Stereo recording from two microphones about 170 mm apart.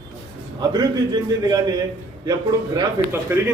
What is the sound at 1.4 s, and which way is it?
Speech, 25° right (ahead or behind).